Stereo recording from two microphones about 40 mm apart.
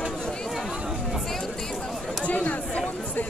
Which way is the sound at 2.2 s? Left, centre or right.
Left.